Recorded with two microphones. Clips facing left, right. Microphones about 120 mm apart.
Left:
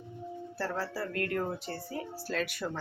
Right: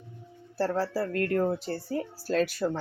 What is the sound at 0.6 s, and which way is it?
Speech, 35° right (ahead or behind).